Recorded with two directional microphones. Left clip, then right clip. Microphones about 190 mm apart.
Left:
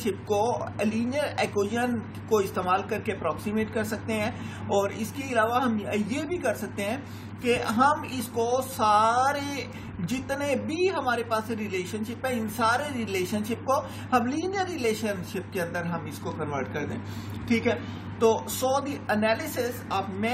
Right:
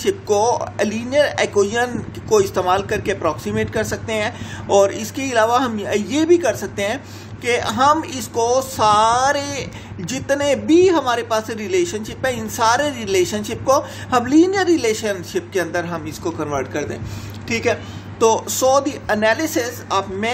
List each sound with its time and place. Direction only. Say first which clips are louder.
0.0 s speech: right 9 dB; 55° right (ahead or behind)